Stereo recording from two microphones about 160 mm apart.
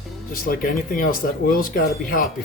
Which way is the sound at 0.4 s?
60° left (ahead or behind).